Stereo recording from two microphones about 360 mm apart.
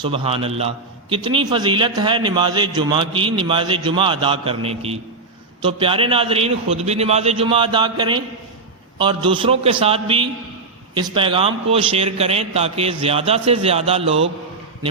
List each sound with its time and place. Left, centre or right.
0.0 s a man's voice: centre